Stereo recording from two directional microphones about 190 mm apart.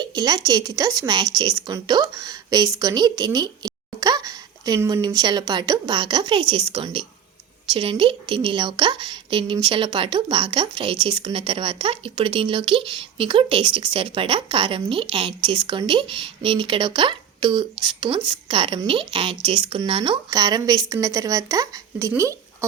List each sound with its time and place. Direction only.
0.0 s a woman's voice: 20° right (ahead or behind)